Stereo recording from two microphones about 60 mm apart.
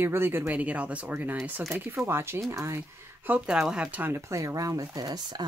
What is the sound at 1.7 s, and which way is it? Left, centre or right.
Speech, right.